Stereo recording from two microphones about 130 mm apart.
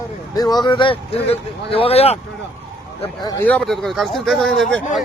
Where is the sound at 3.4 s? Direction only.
10° left (ahead or behind).